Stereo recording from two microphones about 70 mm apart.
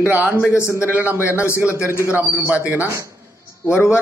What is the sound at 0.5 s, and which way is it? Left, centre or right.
A man's voice, left.